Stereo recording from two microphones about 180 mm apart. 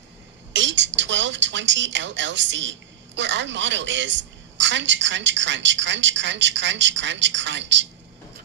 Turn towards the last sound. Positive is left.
turn(degrees=-80)